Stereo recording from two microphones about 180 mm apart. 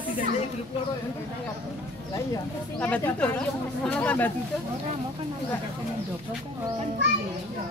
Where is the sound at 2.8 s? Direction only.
10° left (ahead or behind).